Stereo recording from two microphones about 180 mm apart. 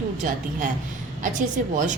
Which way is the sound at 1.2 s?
45° right (ahead or behind).